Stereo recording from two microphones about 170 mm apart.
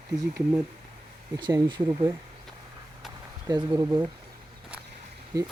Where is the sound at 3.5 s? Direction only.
20° right (ahead or behind).